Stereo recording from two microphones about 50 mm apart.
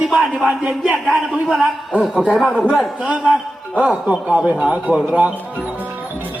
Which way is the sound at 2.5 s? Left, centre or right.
Right.